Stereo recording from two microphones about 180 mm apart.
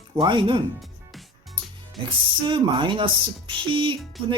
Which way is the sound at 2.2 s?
30° right (ahead or behind).